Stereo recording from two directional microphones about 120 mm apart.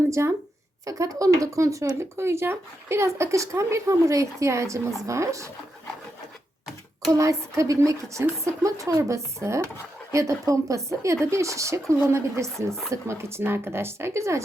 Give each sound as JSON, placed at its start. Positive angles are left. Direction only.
{"t": 0.1, "sound": "speech", "side_deg": -25}
{"t": 7.1, "sound": "speech", "side_deg": -25}